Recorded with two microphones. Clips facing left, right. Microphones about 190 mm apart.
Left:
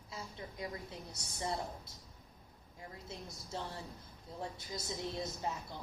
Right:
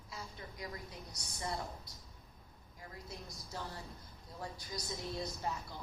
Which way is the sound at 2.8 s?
25° left (ahead or behind).